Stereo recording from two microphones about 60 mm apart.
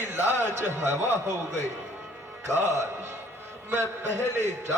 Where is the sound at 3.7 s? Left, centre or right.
Right.